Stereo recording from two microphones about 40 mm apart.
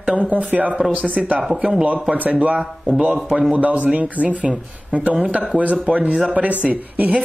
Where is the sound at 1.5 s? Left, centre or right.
Centre.